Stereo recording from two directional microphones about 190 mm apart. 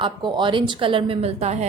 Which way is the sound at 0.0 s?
25° right (ahead or behind).